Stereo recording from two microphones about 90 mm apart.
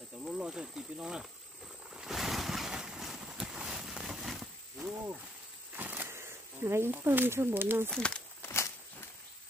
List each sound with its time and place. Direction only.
0.2 s speech: 10° right (ahead or behind)
2.0 s boat: 5° right (ahead or behind)
5.8 s a sound: 20° right (ahead or behind)
7.9 s speech: 10° left (ahead or behind)
8.4 s walk: 30° left (ahead or behind)